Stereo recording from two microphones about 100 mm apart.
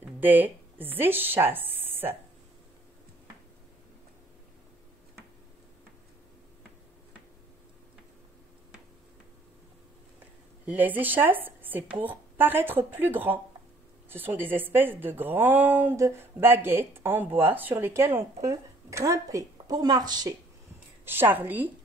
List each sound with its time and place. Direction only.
0.0 s speech: 20° right (ahead or behind)
10.6 s a woman's voice: 15° right (ahead or behind); by 20.3 s 45° right (ahead or behind)
21.0 s a woman's voice: 20° right (ahead or behind)